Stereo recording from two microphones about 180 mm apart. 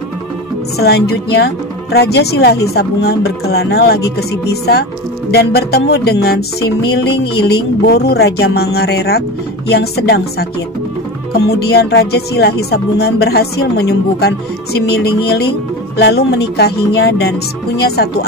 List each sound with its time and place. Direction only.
0.7 s speech: 65° left (ahead or behind)
11.3 s speech: 65° left (ahead or behind)
16.0 s speech: 65° left (ahead or behind)